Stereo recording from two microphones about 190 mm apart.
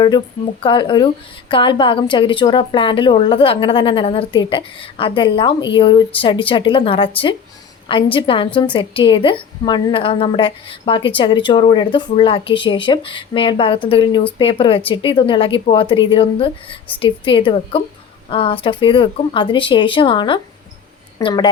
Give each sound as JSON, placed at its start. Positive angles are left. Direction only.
{"t": 0.6, "sound": "a woman's voice", "side_deg": 25}